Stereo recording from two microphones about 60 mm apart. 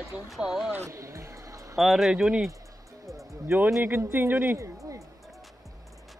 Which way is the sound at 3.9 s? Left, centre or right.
Right.